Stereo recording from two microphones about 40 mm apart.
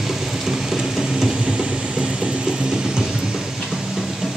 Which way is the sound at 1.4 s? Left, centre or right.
Right.